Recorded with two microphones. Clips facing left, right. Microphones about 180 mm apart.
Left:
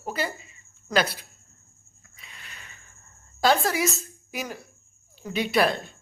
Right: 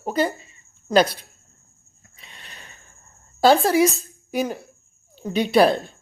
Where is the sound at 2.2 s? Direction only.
30° right (ahead or behind).